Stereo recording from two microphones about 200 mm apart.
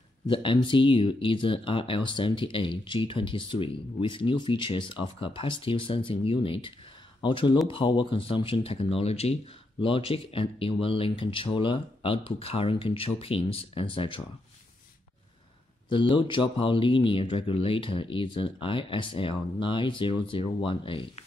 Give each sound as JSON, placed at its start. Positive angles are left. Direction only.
{"t": 0.3, "sound": "speech", "side_deg": 25}
{"t": 15.9, "sound": "speech", "side_deg": 25}